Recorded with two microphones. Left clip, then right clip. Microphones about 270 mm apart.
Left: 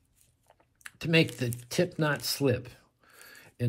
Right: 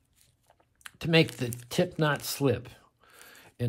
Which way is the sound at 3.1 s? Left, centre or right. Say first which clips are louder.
Left 1 dB; centre.